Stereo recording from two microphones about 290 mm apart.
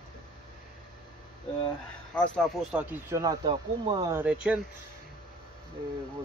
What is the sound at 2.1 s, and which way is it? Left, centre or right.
Speech, centre.